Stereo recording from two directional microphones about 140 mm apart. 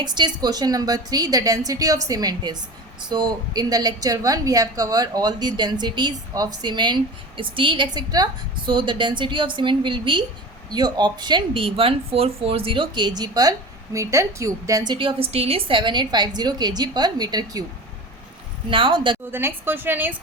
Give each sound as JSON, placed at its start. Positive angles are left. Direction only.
{"t": 0.0, "sound": "a woman's voice", "side_deg": -30}
{"t": 14.9, "sound": "a woman's voice", "side_deg": -40}
{"t": 18.7, "sound": "a woman's voice", "side_deg": -40}
{"t": 19.3, "sound": "a woman's voice", "side_deg": -15}